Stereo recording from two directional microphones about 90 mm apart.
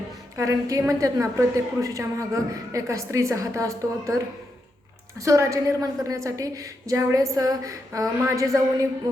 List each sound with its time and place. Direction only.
0.3 s a woman's voice: 35° right (ahead or behind)
5.2 s a woman's voice: 35° right (ahead or behind)